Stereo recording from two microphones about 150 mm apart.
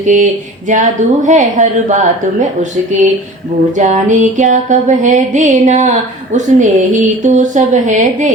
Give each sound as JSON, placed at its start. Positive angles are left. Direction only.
{"t": 0.0, "sound": "music", "side_deg": -55}